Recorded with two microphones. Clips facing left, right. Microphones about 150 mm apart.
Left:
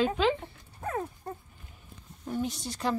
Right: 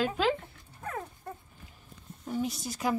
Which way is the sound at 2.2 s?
5° right (ahead or behind).